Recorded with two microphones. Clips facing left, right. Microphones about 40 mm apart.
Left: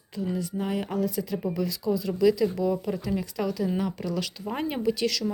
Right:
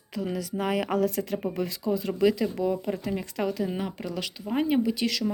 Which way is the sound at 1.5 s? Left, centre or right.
Right.